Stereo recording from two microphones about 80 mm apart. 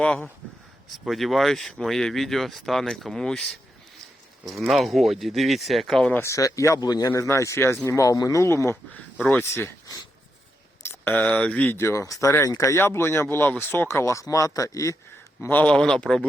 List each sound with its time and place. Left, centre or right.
0.0 s speech: centre
0.9 s speech: centre
4.7 s speech: centre
6.2 s speech: left
7.1 s speech: left
10.8 s speech: left
11.8 s speech: left
15.4 s speech: left
15.6 s speech: centre